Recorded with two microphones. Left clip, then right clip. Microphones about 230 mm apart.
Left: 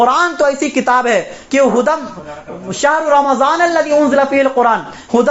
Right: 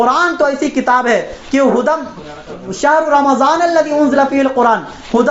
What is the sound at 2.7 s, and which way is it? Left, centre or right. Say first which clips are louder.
A man's voice: right 1 dB; left.